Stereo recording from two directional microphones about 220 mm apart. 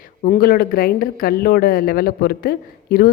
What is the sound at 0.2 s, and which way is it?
A woman's voice, 40° left (ahead or behind).